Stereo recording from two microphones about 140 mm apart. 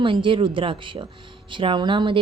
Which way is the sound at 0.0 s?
35° right (ahead or behind).